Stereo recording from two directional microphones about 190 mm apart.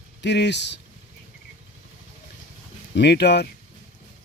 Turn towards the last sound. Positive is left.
turn(degrees=60)  # may be behind; listen again after turning